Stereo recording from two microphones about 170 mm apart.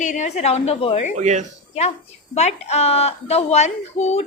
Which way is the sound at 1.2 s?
45° right (ahead or behind).